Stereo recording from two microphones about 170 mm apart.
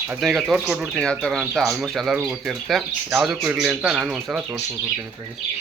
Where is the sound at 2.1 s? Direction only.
10° right (ahead or behind).